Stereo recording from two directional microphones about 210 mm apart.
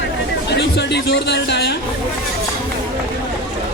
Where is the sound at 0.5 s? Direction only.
55° left (ahead or behind).